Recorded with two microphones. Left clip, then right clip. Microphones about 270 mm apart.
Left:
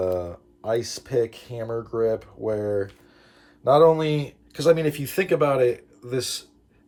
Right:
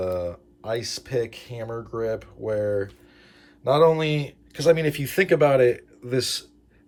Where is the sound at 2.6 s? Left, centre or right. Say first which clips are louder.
Right 1 dB; centre.